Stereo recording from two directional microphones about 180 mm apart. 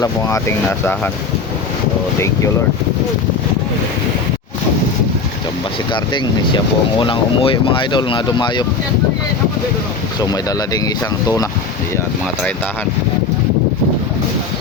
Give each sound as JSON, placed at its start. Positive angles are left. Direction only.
{"t": 0.0, "sound": "speech", "side_deg": 15}
{"t": 5.9, "sound": "speech", "side_deg": 25}
{"t": 10.7, "sound": "speech", "side_deg": 20}